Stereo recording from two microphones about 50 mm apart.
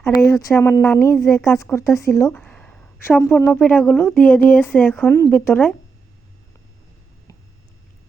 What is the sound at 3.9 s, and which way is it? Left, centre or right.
Speech, left.